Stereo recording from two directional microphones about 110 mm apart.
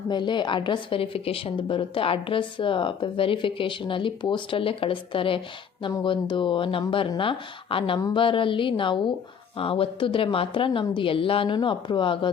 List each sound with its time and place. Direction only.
0.1 s a woman's voice: 45° left (ahead or behind)